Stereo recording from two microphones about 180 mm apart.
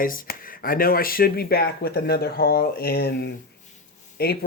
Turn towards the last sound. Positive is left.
turn(degrees=60)  # may be behind; listen again after turning